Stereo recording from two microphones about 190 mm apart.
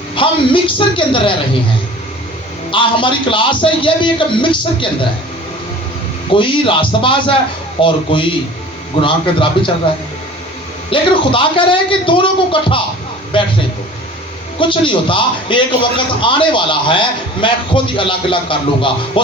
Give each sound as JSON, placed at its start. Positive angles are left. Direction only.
{"t": 0.2, "sound": "a man's voice", "side_deg": 25}
{"t": 2.7, "sound": "a man's voice", "side_deg": 25}
{"t": 6.3, "sound": "a man's voice", "side_deg": 25}
{"t": 10.9, "sound": "a man's voice", "side_deg": 25}
{"t": 14.6, "sound": "a man's voice", "side_deg": 25}